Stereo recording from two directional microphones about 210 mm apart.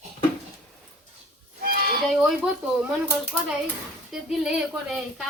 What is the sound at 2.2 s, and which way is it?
Speech, 5° right (ahead or behind).